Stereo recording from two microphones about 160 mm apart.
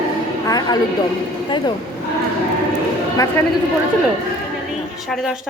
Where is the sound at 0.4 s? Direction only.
25° left (ahead or behind).